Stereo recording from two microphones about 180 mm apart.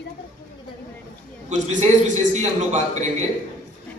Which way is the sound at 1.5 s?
40° right (ahead or behind).